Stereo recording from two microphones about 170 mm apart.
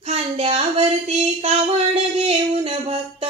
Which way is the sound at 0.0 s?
35° right (ahead or behind).